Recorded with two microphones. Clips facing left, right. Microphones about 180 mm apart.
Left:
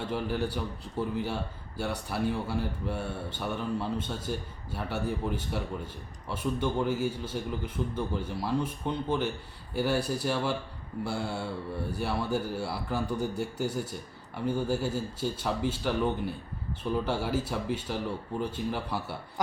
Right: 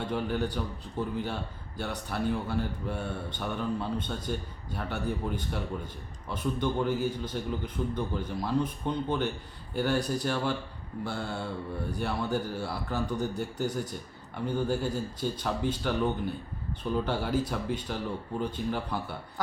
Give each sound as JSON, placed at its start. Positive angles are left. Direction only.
{"t": 0.0, "sound": "a man's voice", "side_deg": 5}